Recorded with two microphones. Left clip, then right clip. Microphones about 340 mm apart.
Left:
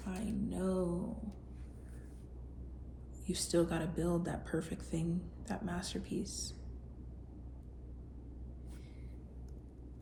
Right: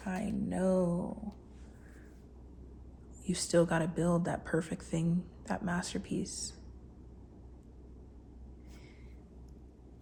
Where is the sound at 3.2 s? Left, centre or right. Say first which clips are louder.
Right 5 dB; centre.